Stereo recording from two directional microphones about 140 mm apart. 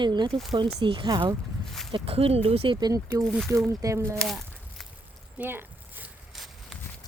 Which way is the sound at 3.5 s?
20° right (ahead or behind).